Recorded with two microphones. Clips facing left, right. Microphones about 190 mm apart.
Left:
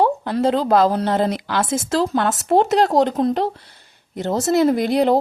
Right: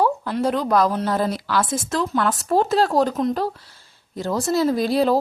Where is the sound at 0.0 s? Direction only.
30° left (ahead or behind).